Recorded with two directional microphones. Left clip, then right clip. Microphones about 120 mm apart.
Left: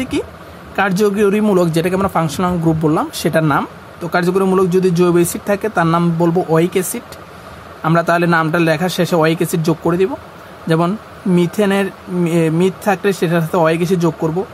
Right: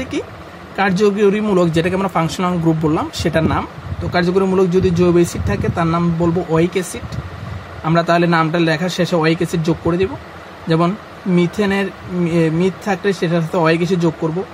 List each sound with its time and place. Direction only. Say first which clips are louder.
0.7 s speech: even; 45° left (ahead or behind)
4.1 s a man's voice: left 1 dB; 45° left (ahead or behind)
11.3 s a man's voice: left 2 dB; 30° left (ahead or behind)